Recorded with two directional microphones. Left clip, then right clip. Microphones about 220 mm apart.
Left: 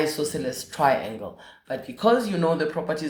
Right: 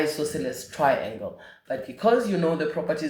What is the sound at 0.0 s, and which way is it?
Speech, 35° left (ahead or behind).